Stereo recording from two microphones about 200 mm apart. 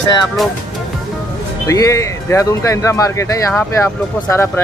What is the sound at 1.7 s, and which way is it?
Speech, 15° left (ahead or behind).